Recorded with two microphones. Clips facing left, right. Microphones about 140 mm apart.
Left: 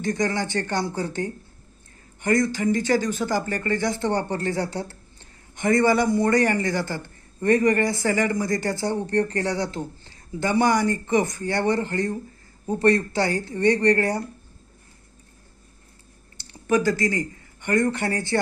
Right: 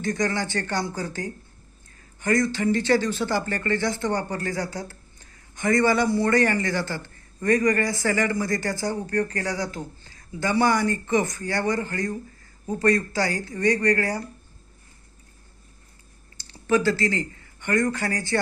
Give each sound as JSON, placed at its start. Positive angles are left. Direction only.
{"t": 0.0, "sound": "a man's voice", "side_deg": 20}
{"t": 16.4, "sound": "speech", "side_deg": 20}